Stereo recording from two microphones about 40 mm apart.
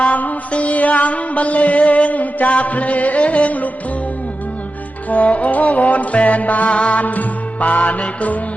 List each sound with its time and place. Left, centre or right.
0.0 s music: left
5.0 s music: left
7.0 s music: left